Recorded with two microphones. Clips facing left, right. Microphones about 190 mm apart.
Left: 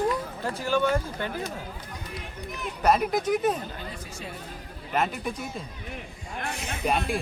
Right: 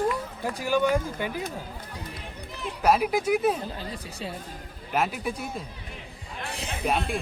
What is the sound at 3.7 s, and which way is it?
Speech, 30° right (ahead or behind).